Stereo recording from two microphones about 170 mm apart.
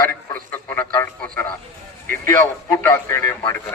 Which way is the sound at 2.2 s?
15° left (ahead or behind).